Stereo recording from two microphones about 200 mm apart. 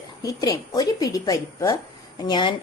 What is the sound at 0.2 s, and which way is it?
A woman's voice, 15° left (ahead or behind).